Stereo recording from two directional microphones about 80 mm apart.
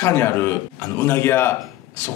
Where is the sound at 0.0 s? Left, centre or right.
Left.